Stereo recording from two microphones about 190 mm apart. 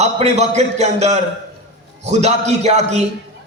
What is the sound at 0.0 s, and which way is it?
A man's voice, 35° right (ahead or behind).